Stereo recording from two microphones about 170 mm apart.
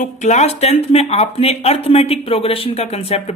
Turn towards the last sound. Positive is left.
turn(degrees=35)  # may be behind; listen again after turning